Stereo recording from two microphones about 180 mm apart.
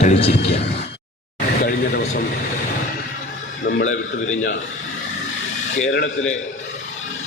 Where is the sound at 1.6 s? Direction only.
50° left (ahead or behind).